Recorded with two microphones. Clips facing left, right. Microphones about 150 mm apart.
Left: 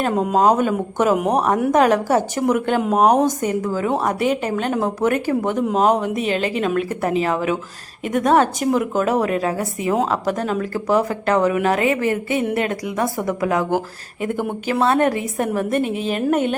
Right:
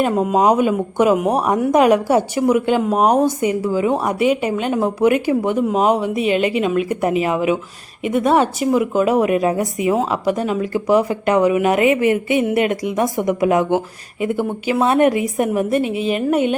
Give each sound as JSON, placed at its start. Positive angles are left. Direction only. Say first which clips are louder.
{"t": 0.0, "sound": "speech", "louder": "right 1 dB", "side_deg": 0}
{"t": 14.2, "sound": "speech", "louder": "right 3 dB", "side_deg": -10}